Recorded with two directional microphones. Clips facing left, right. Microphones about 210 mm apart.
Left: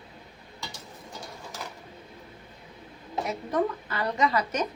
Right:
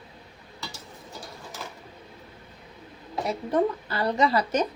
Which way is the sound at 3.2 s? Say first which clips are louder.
Right 3 dB; 30° right (ahead or behind).